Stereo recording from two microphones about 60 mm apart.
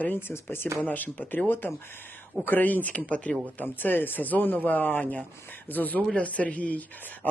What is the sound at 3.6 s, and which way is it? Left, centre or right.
Speech, left.